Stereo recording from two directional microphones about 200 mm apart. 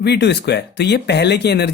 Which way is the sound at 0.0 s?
55° left (ahead or behind).